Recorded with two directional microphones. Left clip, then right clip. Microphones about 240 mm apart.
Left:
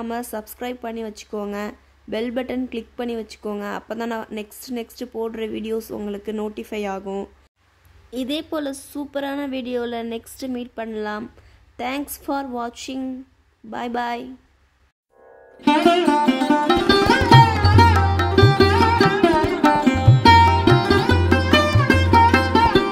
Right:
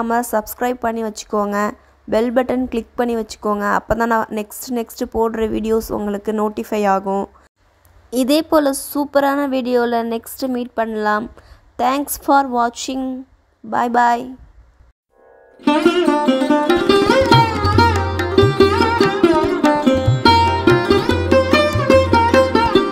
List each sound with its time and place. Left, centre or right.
0.0 s speech: centre
15.6 s sitar: centre